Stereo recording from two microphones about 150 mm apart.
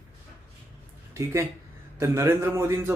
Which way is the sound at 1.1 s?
20° right (ahead or behind).